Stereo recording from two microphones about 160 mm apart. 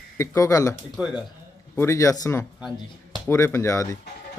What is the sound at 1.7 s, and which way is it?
A man's voice, 20° left (ahead or behind).